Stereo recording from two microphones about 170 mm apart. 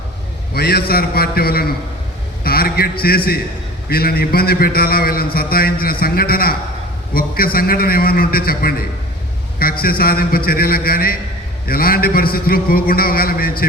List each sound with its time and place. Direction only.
0.5 s a man's voice: 70° left (ahead or behind)